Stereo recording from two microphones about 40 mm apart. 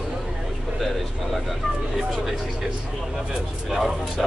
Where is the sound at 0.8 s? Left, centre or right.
Centre.